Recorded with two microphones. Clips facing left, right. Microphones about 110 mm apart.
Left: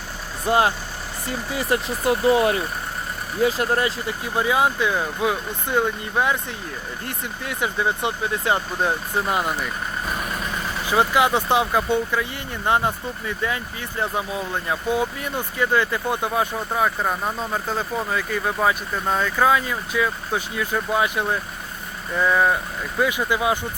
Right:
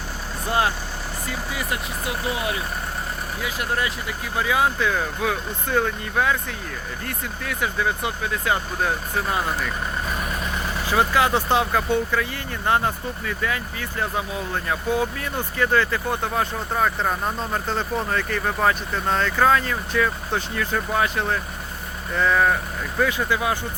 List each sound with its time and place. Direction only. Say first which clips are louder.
0.5 s speech: left 4 dB; 20° left (ahead or behind)
1.5 s speech: left 5 dB; 40° left (ahead or behind); by 9.6 s 10° left (ahead or behind)
10.8 s speech: left 1 dB; 15° left (ahead or behind)